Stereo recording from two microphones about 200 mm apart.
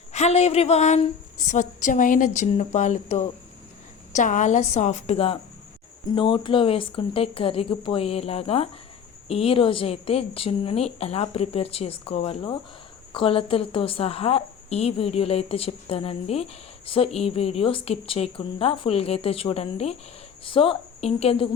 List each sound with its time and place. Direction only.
0.1 s a woman's voice: 35° left (ahead or behind)